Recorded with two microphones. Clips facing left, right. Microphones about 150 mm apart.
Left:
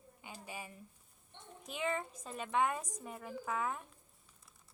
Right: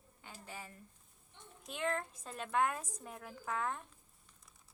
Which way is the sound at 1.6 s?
Centre (ahead or behind).